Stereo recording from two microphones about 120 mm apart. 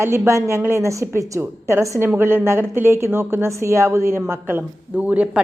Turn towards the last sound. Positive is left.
turn(degrees=-10)  # may be behind; listen again after turning